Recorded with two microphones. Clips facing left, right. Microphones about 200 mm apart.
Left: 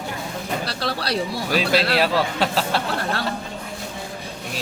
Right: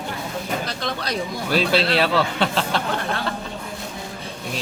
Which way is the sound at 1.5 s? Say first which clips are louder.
Right 1 dB; 10° left (ahead or behind).